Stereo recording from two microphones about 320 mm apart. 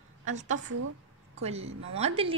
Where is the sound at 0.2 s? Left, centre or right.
Right.